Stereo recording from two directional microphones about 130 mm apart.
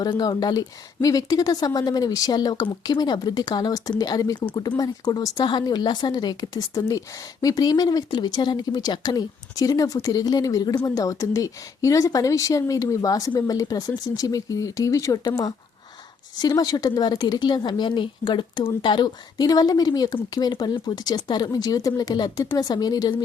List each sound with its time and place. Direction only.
0.0 s a woman's voice: 30° left (ahead or behind)